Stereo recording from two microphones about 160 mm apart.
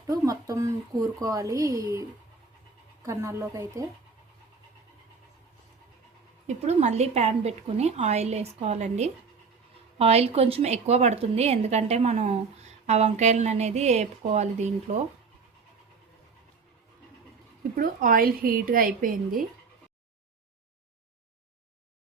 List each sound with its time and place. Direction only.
0.3 s speech: 20° right (ahead or behind)
6.5 s a woman's voice: 45° right (ahead or behind)
17.7 s a woman's voice: 60° right (ahead or behind)